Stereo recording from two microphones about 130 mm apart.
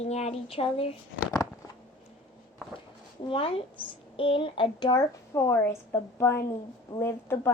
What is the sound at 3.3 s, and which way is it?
A woman's voice, 45° left (ahead or behind).